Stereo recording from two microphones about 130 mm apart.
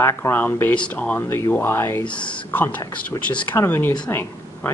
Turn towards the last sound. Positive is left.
turn(degrees=10)  # may be behind; listen again after turning